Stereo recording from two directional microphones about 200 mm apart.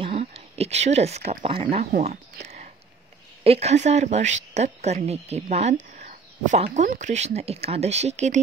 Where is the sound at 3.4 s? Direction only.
30° right (ahead or behind).